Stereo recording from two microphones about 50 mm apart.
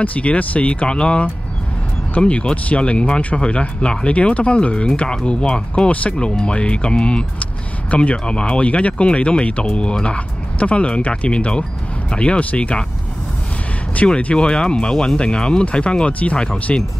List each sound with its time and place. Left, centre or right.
0.0 s speech: left
13.9 s speech: left